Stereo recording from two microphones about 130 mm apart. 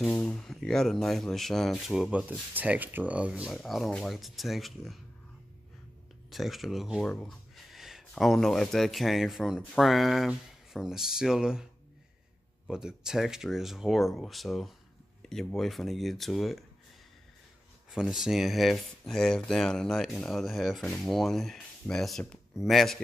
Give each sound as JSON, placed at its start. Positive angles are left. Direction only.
{"t": 0.0, "sound": "speech", "side_deg": 10}
{"t": 6.3, "sound": "speech", "side_deg": 0}
{"t": 12.6, "sound": "speech", "side_deg": -5}
{"t": 17.9, "sound": "speech", "side_deg": -5}